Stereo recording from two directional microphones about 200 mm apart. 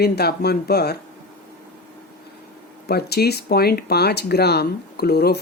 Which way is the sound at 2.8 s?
55° left (ahead or behind).